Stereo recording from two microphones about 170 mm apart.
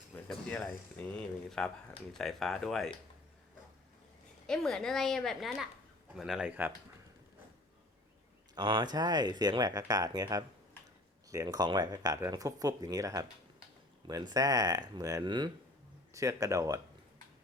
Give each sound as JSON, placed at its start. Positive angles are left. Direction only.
{"t": 0.3, "sound": "speech", "side_deg": 5}
{"t": 4.4, "sound": "speech", "side_deg": 5}
{"t": 8.5, "sound": "speech", "side_deg": -25}